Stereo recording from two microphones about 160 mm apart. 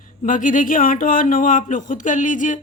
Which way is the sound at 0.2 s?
55° left (ahead or behind).